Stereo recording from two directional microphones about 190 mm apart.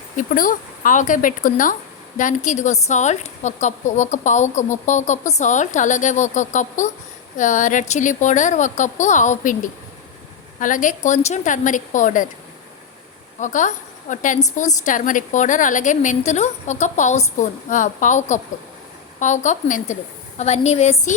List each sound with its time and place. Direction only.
0.2 s a woman's voice: 45° left (ahead or behind)
10.6 s a woman's voice: 45° left (ahead or behind)
13.4 s a woman's voice: 40° left (ahead or behind)